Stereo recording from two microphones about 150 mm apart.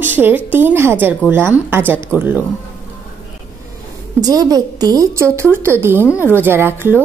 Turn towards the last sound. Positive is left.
turn(degrees=-15)  # may be behind; listen again after turning